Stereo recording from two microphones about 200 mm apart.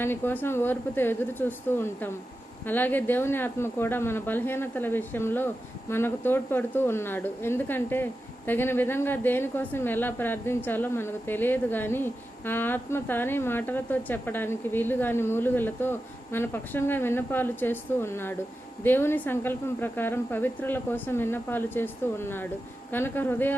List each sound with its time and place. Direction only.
0.0 s a woman's voice: 10° left (ahead or behind)